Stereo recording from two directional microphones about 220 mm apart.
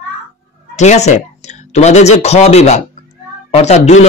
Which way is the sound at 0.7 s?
30° left (ahead or behind).